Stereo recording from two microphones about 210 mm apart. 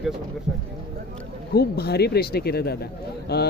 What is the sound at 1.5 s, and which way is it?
Speech, 50° left (ahead or behind).